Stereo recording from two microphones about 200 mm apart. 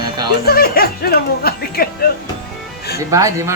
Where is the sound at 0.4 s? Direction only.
50° left (ahead or behind).